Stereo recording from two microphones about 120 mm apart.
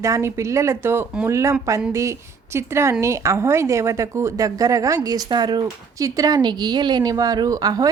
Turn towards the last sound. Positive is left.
turn(degrees=-30)  # may be behind; listen again after turning